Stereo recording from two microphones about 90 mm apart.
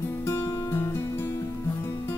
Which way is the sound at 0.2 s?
30° left (ahead or behind).